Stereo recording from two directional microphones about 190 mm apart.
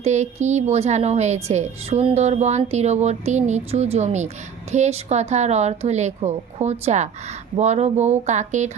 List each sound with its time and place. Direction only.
0.0 s a woman's voice: 35° right (ahead or behind)